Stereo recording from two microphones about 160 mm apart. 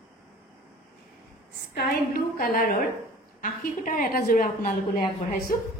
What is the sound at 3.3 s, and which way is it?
A woman's voice, 55° left (ahead or behind).